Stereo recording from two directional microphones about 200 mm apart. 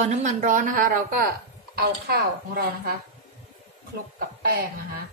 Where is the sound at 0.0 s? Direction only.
35° right (ahead or behind).